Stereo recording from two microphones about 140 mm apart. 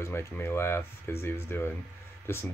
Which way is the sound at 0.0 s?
20° left (ahead or behind).